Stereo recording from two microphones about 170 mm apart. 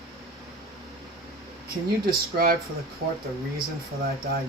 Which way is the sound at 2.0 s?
60° right (ahead or behind).